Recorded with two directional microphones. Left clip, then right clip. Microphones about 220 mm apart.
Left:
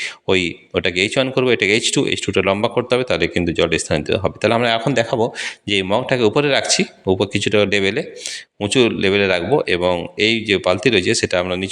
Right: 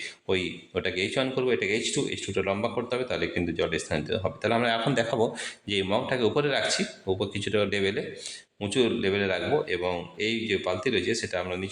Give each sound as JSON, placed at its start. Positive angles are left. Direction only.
{"t": 0.0, "sound": "speech", "side_deg": 35}